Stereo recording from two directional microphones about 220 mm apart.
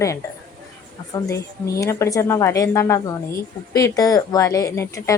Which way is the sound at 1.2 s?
15° left (ahead or behind).